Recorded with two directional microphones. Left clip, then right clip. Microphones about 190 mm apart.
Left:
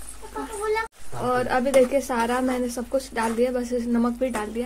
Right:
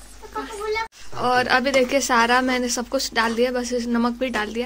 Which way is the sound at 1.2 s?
10° right (ahead or behind).